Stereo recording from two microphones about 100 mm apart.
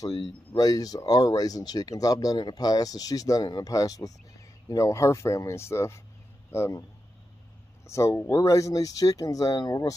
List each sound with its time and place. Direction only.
0.6 s speech: 40° left (ahead or behind)
7.8 s speech: 30° left (ahead or behind)